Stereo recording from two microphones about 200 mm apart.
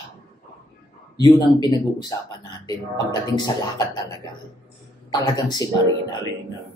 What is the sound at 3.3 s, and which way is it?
Speech, 20° left (ahead or behind).